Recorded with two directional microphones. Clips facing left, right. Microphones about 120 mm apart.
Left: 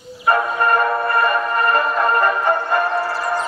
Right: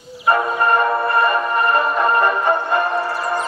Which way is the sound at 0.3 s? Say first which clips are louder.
Even; 5° right (ahead or behind).